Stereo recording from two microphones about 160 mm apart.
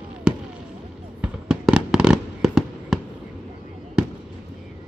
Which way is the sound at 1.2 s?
5° right (ahead or behind).